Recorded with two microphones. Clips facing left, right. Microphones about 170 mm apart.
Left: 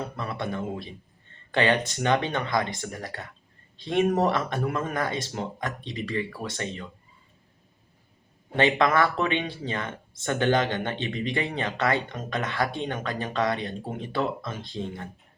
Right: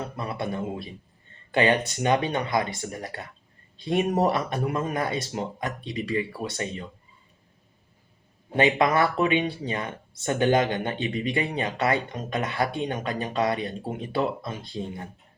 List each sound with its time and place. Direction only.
0.2 s speech: 15° right (ahead or behind)
8.5 s speech: 15° right (ahead or behind)